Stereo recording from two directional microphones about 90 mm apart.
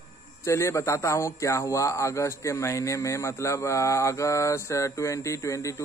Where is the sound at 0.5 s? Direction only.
35° left (ahead or behind).